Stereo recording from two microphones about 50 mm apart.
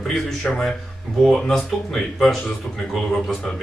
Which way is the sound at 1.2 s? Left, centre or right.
Centre.